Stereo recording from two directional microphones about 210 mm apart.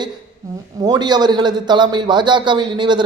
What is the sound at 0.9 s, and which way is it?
A man's voice, 20° right (ahead or behind).